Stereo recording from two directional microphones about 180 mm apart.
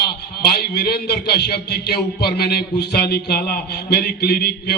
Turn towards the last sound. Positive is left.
turn(degrees=60)  # may be behind; listen again after turning